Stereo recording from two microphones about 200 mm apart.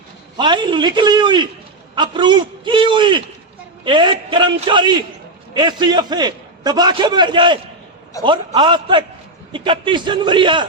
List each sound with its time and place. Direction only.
0.3 s a man's voice: 25° right (ahead or behind)